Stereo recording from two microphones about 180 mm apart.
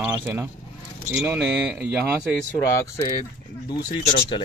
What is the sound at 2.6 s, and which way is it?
Speech, 15° left (ahead or behind).